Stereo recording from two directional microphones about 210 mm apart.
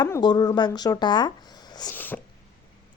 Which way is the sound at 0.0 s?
20° left (ahead or behind).